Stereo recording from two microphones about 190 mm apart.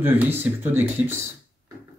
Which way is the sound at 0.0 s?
10° right (ahead or behind).